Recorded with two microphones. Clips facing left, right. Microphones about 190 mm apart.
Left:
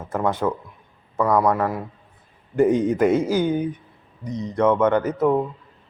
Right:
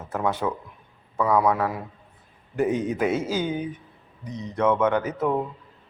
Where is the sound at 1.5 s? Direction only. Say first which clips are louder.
Left 2 dB; 5° right (ahead or behind).